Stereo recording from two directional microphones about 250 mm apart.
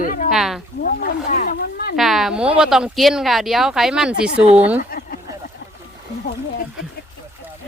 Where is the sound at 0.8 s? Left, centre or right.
Left.